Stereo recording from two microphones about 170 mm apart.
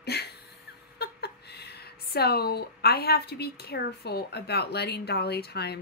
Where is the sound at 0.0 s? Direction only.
70° left (ahead or behind).